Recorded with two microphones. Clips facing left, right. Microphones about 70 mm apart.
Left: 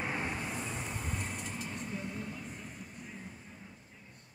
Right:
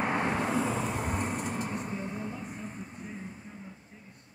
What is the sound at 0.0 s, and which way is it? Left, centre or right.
Vehicle, right.